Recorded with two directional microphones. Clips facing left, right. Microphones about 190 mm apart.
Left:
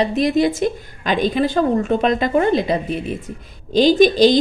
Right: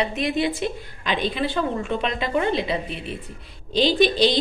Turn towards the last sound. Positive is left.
turn(degrees=45)  # may be behind; listen again after turning